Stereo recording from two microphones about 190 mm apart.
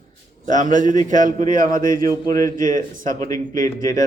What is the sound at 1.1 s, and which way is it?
Speech, 40° right (ahead or behind).